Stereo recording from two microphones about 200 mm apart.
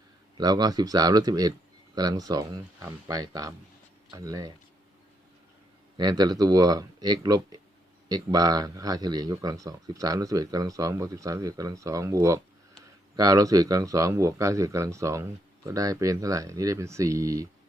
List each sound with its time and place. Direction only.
0.3 s speech: 20° right (ahead or behind)
6.0 s speech: 20° right (ahead or behind)